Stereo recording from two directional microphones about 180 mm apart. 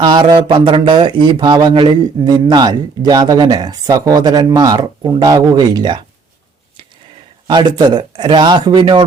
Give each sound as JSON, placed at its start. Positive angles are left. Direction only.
{"t": 0.0, "sound": "a man's voice", "side_deg": -25}
{"t": 7.4, "sound": "a man's voice", "side_deg": -25}